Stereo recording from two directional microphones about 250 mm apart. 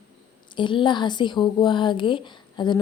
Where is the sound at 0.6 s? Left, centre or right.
Centre.